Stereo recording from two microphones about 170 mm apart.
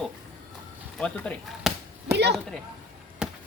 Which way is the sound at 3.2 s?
5° right (ahead or behind).